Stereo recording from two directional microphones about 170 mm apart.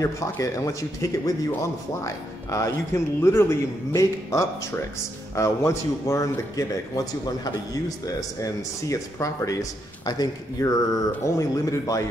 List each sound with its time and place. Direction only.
0.0 s a man's voice: 20° left (ahead or behind)